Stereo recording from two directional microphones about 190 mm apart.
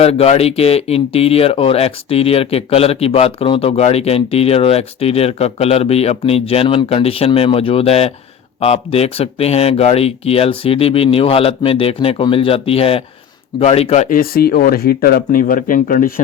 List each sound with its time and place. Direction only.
0.0 s speech: 35° left (ahead or behind)